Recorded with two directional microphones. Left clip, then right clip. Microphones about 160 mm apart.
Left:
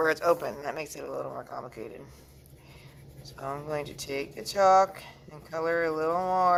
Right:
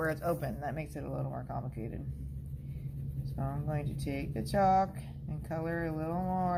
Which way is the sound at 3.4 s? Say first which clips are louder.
Left 7 dB; 40° left (ahead or behind).